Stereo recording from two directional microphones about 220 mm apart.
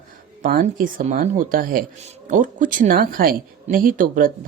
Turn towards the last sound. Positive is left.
turn(degrees=-40)  # may be behind; listen again after turning